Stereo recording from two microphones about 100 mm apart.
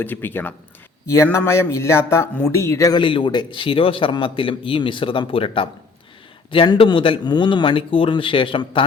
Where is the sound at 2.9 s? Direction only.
55° left (ahead or behind).